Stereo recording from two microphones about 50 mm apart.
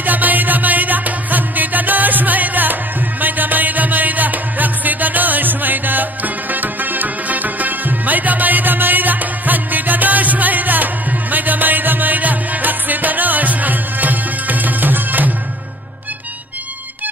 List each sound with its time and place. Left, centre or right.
0.0 s music: right